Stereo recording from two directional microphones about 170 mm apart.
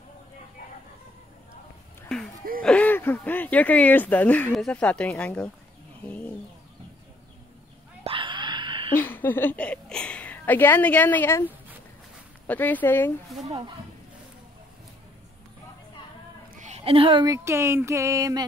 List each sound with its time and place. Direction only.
2.1 s speech: 5° left (ahead or behind)
8.0 s a sound: 30° right (ahead or behind)
8.9 s a woman's voice: 10° left (ahead or behind)
12.4 s speech: 10° left (ahead or behind)
13.3 s speech: centre (ahead or behind)
16.5 s speech: 40° right (ahead or behind); by 18.4 s 20° right (ahead or behind)